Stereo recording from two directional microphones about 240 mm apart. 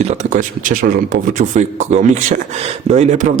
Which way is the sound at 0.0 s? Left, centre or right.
Right.